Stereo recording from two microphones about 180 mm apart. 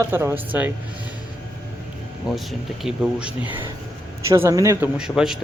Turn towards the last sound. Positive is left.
turn(degrees=-5)  # may be behind; listen again after turning